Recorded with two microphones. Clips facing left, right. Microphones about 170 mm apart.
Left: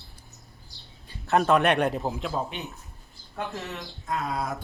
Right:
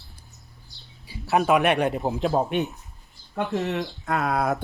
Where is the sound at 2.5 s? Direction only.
60° right (ahead or behind).